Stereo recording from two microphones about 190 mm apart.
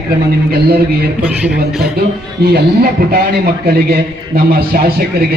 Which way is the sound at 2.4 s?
55° right (ahead or behind).